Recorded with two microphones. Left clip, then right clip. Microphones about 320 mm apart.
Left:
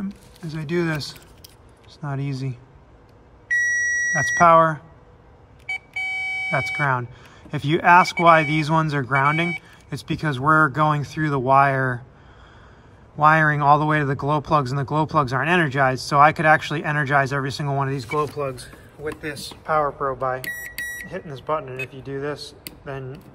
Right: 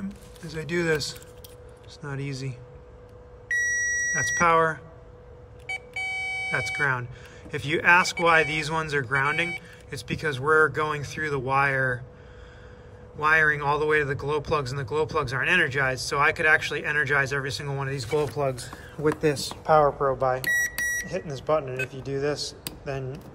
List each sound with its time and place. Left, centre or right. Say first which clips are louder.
0.4 s speech: left 3 dB; centre
3.9 s speech: left 4 dB; centre
5.7 s beep: left 4 dB; centre
6.5 s speech: left 3 dB; centre
13.2 s speech: left 5 dB; centre
18.3 s speech: even; right
19.2 s speech: right 4 dB; centre